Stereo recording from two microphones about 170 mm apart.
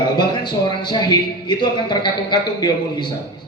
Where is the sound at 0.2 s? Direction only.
25° left (ahead or behind).